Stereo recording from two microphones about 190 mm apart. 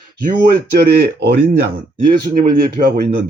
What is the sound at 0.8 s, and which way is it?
Speech, 60° right (ahead or behind).